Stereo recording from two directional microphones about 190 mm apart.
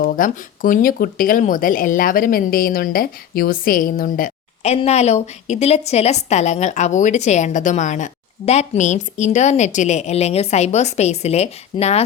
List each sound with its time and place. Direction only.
0.0 s speech: 45° left (ahead or behind)